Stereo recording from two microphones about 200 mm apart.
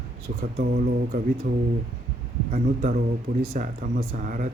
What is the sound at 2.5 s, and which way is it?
A man's voice, 40° right (ahead or behind).